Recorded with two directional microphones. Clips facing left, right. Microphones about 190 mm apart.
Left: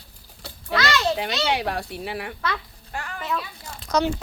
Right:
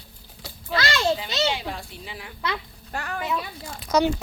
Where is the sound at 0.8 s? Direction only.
30° right (ahead or behind).